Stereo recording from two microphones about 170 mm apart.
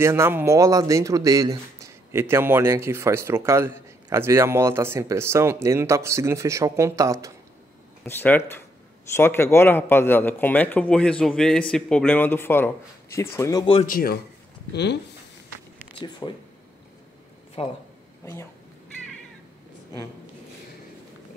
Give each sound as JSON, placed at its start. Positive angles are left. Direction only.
{"t": 0.0, "sound": "speech", "side_deg": -15}
{"t": 8.0, "sound": "a man's voice", "side_deg": 10}
{"t": 13.8, "sound": "speech", "side_deg": 60}
{"t": 14.7, "sound": "speech", "side_deg": 85}
{"t": 15.9, "sound": "speech", "side_deg": 30}
{"t": 17.6, "sound": "speech", "side_deg": 35}
{"t": 18.2, "sound": "speech", "side_deg": 15}